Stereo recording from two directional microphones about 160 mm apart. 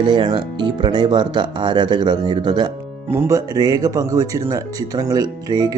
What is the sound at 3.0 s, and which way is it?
Speech, 15° right (ahead or behind).